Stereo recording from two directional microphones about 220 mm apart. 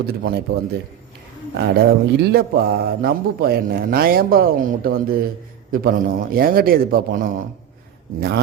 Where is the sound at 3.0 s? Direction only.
45° right (ahead or behind).